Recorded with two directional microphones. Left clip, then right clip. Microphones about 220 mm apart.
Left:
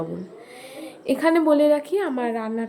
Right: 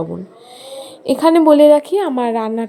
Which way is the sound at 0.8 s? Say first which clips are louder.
Right 7 dB; 25° right (ahead or behind).